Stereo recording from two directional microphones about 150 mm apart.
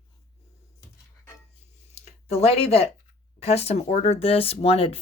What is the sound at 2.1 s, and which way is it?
Speech, 45° left (ahead or behind).